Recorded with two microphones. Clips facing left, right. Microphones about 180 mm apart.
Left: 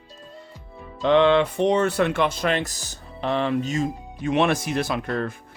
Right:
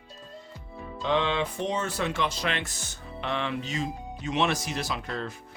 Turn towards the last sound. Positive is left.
turn(degrees=55)  # may be behind; listen again after turning